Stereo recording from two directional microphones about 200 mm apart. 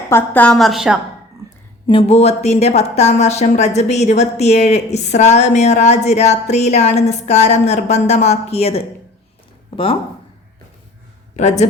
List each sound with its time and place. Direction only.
0.1 s a woman's voice: 10° left (ahead or behind)
1.9 s a woman's voice: 30° left (ahead or behind)
11.3 s a woman's voice: 35° left (ahead or behind)